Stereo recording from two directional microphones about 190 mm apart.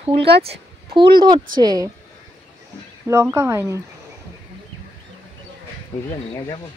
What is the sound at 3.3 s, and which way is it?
Speech, 15° right (ahead or behind).